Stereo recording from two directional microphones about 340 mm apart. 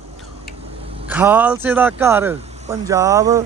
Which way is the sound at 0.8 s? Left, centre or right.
Centre.